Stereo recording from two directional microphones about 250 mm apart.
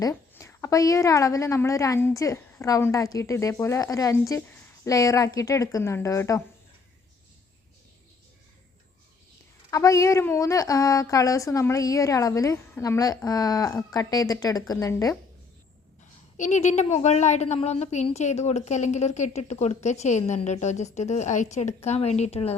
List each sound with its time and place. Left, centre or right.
0.0 s a woman's voice: centre
9.6 s a woman's voice: centre
16.4 s a woman's voice: left